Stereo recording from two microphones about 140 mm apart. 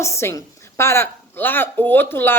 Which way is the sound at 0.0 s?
20° left (ahead or behind).